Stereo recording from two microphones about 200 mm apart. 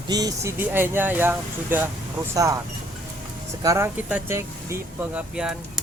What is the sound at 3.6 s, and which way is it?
Speech, 15° right (ahead or behind).